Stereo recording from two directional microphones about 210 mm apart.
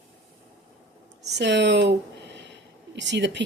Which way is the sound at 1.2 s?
55° right (ahead or behind).